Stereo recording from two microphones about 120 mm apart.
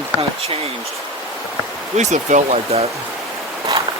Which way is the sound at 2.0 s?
85° right.